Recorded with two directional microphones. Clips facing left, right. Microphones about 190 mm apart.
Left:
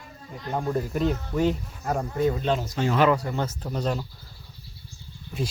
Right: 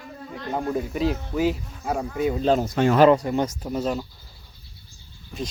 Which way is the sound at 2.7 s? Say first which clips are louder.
Right 5 dB; 60° right (ahead or behind).